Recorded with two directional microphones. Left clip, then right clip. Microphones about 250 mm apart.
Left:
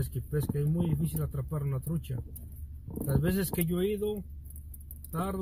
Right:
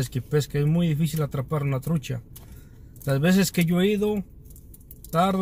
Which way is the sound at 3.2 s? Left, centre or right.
Centre.